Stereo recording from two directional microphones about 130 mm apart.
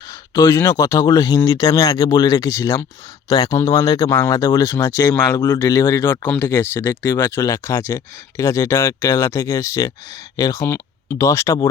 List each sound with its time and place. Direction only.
0.1 s speech: 25° left (ahead or behind)